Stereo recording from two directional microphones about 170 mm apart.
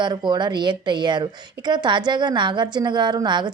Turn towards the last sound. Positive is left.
turn(degrees=-25)  # may be behind; listen again after turning